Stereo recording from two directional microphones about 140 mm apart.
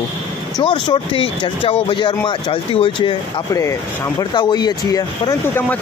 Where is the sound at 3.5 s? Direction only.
25° left (ahead or behind).